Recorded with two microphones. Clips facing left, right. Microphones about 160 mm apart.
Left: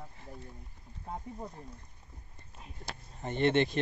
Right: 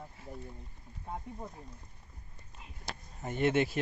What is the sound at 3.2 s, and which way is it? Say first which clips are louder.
Speech: left 1 dB; 5° right (ahead or behind).